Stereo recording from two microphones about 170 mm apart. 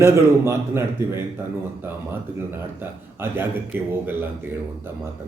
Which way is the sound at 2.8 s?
15° right (ahead or behind).